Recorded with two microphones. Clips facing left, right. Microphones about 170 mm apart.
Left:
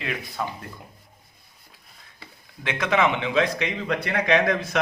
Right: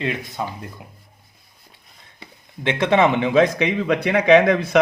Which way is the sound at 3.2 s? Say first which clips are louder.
Right 7 dB; 50° right (ahead or behind).